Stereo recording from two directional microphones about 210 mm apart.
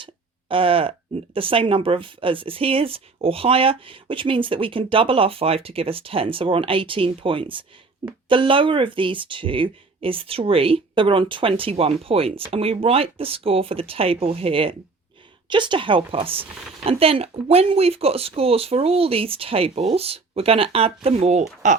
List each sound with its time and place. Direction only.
0.0 s speech: 25° right (ahead or behind)